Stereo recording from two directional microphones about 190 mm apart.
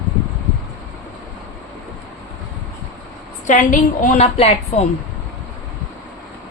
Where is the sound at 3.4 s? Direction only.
40° left (ahead or behind).